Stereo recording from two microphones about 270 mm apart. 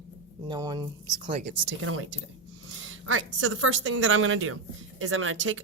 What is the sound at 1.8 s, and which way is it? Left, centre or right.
Speech, right.